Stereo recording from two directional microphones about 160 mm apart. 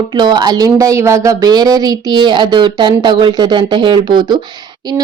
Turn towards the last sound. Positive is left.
turn(degrees=-30)  # may be behind; listen again after turning